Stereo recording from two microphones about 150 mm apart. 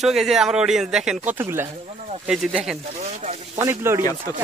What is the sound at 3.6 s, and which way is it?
Speech, 15° right (ahead or behind).